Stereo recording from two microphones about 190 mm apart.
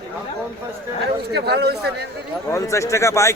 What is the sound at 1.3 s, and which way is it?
Speech, 60° right (ahead or behind).